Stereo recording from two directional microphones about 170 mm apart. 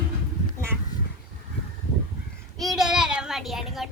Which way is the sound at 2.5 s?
Centre (ahead or behind).